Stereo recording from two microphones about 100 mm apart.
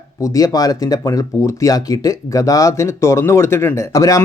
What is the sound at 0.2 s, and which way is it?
Speech, 35° left (ahead or behind).